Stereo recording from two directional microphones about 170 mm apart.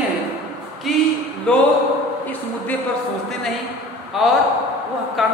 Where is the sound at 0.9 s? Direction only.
Centre (ahead or behind).